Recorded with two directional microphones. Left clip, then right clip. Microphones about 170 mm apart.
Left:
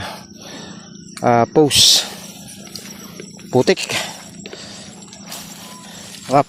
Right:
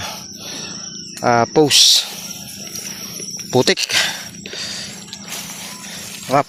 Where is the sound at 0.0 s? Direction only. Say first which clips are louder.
Right 2 dB; 40° left (ahead or behind).